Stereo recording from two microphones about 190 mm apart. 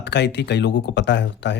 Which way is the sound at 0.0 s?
60° left (ahead or behind).